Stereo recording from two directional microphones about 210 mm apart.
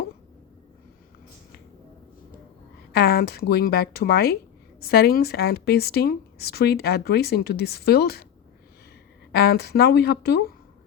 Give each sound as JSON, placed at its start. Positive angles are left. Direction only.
{"t": 2.9, "sound": "a woman's voice", "side_deg": 50}
{"t": 9.3, "sound": "a woman's voice", "side_deg": 50}